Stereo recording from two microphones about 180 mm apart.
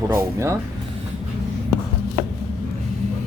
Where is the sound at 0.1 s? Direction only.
15° right (ahead or behind).